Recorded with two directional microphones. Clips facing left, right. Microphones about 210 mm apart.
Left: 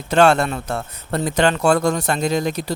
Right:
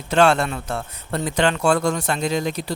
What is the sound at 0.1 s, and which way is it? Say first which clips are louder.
A man's voice: left 2 dB; 40° left (ahead or behind).